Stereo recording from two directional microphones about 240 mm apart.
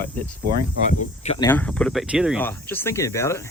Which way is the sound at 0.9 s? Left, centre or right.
Left.